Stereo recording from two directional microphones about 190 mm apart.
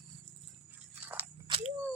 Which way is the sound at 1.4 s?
30° right (ahead or behind).